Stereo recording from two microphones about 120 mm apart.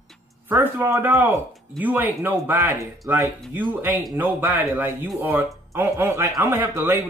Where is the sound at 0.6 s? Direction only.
15° right (ahead or behind).